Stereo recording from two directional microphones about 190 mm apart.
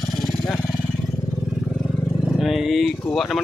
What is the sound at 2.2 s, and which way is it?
Vehicle, centre (ahead or behind).